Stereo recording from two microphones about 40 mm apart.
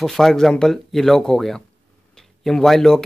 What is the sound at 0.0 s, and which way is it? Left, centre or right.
Speech, centre.